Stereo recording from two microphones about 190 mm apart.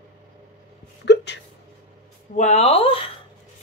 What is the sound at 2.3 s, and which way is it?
Speech, 35° left (ahead or behind).